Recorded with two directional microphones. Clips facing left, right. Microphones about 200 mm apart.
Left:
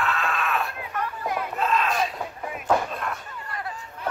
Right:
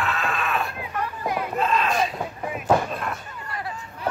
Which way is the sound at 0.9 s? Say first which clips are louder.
Right 1 dB; 10° right (ahead or behind).